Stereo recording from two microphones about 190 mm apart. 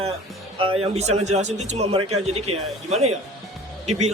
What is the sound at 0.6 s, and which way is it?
A man's voice, 30° right (ahead or behind).